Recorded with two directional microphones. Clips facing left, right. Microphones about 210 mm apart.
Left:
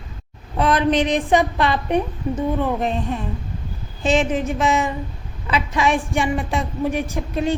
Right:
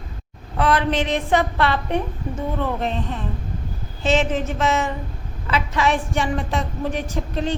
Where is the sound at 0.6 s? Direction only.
20° left (ahead or behind).